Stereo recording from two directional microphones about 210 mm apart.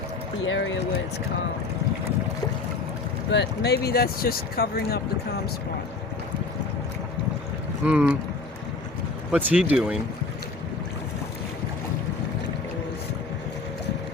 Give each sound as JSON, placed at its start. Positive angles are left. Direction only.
{"t": 0.4, "sound": "speech", "side_deg": 65}
{"t": 3.3, "sound": "speech", "side_deg": 50}
{"t": 7.9, "sound": "speech", "side_deg": -5}
{"t": 9.3, "sound": "speech", "side_deg": -5}